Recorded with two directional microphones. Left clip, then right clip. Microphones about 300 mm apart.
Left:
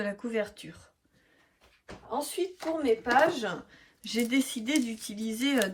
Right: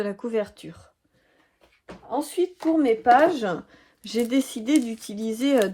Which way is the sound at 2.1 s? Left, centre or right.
Right.